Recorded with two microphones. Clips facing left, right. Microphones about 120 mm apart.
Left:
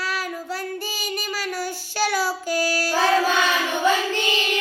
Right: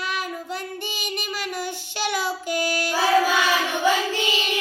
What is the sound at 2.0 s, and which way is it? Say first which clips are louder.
Child singing: left 2 dB; 20° right (ahead or behind).